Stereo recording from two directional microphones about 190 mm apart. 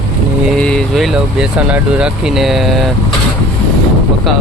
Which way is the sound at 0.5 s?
5° left (ahead or behind).